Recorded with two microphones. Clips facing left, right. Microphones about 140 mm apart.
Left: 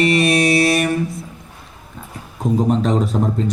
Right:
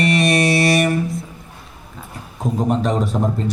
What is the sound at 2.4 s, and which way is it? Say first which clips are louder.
Mantra: left 4 dB; centre (ahead or behind).